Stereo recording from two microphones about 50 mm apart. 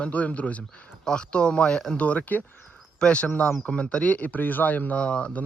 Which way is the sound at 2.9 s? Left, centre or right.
Left.